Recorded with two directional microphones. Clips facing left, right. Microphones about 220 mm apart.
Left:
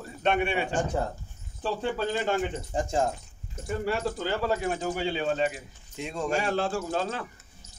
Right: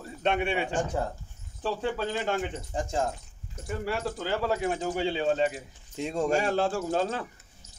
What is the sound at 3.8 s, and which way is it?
Speech, 15° right (ahead or behind).